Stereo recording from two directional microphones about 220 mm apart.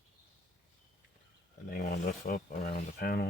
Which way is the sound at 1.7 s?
45° left (ahead or behind).